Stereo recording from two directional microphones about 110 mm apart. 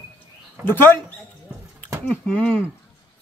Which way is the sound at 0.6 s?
20° left (ahead or behind).